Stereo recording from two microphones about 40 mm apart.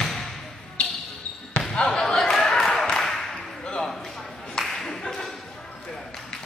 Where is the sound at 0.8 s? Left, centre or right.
Left.